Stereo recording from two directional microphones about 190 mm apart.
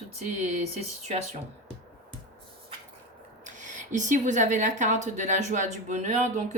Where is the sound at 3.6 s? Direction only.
40° right (ahead or behind).